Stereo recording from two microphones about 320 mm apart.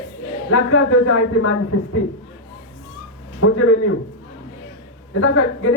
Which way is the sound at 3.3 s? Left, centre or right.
Left.